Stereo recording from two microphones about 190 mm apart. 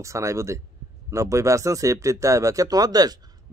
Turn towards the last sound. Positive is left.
turn(degrees=-20)  # may be behind; listen again after turning